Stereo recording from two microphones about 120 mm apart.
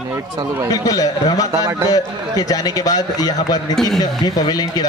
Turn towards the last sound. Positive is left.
turn(degrees=35)  # may be behind; listen again after turning